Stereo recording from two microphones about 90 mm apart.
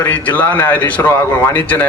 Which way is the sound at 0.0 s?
15° left (ahead or behind).